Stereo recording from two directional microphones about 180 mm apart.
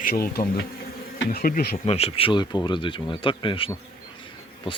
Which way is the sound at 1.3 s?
50° left (ahead or behind).